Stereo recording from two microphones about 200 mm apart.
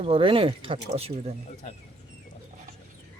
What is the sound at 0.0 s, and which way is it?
Speech, 25° right (ahead or behind).